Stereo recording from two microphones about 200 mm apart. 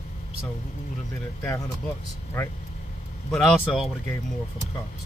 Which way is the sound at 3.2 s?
Centre (ahead or behind).